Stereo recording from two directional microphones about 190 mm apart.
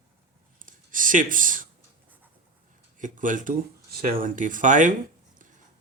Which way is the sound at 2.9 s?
45° right (ahead or behind).